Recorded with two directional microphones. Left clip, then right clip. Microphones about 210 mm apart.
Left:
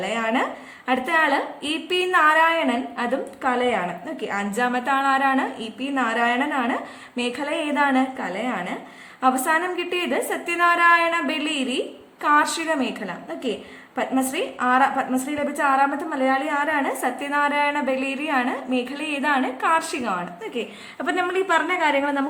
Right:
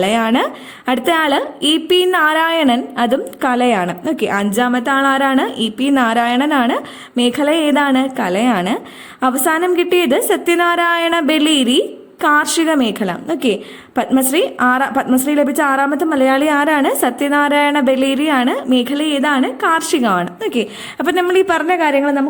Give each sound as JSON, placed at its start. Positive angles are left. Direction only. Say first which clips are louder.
{"t": 0.0, "sound": "a woman's voice", "louder": "right 8 dB", "side_deg": -40}